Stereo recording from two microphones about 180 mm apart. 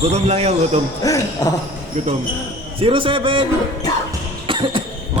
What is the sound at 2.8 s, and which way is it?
Speech, 30° right (ahead or behind).